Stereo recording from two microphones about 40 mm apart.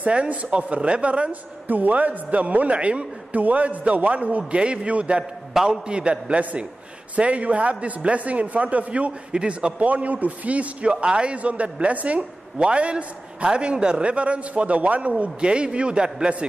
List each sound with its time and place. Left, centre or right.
0.0 s a man's voice: right
1.7 s a man's voice: right
9.3 s a man's voice: right
9.8 s a man's voice: right